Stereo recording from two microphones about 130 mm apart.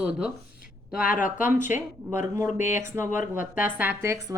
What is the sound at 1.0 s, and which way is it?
Speech, 90° left.